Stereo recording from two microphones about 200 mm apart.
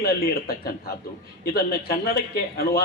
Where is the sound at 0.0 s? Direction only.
50° left (ahead or behind).